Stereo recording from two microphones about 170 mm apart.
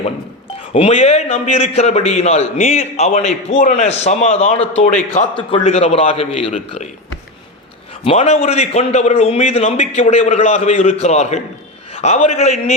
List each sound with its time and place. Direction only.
0.7 s a man's voice: 35° left (ahead or behind)
5.2 s a man's voice: 45° left (ahead or behind)
8.0 s a man's voice: 35° left (ahead or behind)